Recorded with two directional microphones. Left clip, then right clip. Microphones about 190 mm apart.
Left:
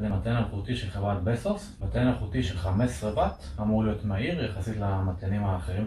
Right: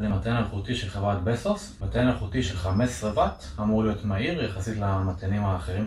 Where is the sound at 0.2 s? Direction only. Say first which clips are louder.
Right 3 dB; centre (ahead or behind).